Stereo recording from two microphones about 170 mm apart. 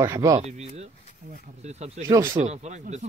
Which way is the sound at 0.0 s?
20° right (ahead or behind).